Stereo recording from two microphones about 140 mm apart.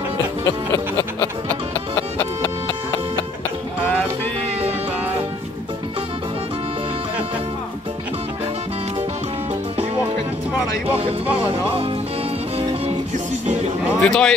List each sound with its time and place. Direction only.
0.5 s music: 25° left (ahead or behind)
11.2 s music: 10° right (ahead or behind)
13.9 s speech: 5° left (ahead or behind)